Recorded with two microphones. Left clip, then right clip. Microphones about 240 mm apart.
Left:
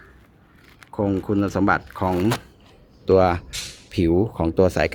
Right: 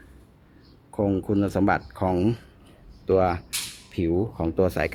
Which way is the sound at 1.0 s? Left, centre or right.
Centre.